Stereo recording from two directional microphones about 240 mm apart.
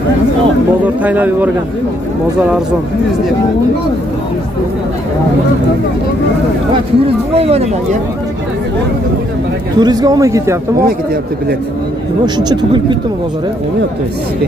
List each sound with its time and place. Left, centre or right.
0.8 s speech: centre
7.3 s speech: right
9.8 s speech: centre
12.4 s speech: centre